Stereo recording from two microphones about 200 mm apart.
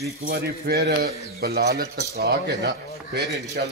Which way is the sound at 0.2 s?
50° right (ahead or behind).